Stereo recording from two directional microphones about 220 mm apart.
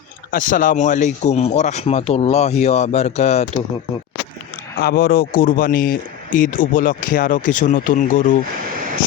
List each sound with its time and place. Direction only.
0.3 s speech: 35° left (ahead or behind)
4.8 s speech: 45° left (ahead or behind)